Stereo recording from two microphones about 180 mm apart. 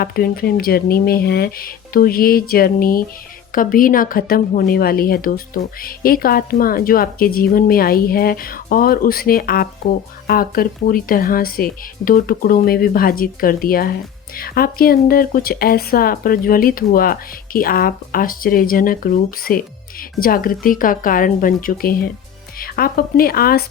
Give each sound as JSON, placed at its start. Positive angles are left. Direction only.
{"t": 0.0, "sound": "a woman's voice", "side_deg": 55}